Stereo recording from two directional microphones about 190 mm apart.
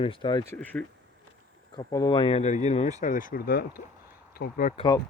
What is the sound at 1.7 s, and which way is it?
Speech, 20° left (ahead or behind).